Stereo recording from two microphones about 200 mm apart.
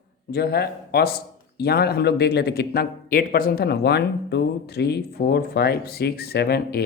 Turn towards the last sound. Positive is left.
turn(degrees=50)  # may be behind; listen again after turning